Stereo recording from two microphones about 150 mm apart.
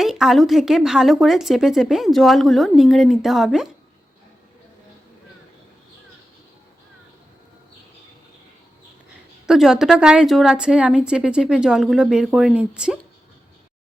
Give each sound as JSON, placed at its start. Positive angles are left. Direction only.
{"t": 0.0, "sound": "speech", "side_deg": 0}
{"t": 9.5, "sound": "speech", "side_deg": -5}